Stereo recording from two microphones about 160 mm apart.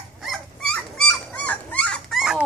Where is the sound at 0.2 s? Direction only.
Centre (ahead or behind).